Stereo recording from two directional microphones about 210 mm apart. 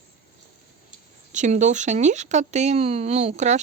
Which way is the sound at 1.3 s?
35° right (ahead or behind).